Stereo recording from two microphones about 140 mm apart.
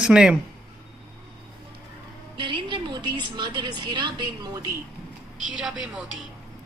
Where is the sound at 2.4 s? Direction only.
35° right (ahead or behind).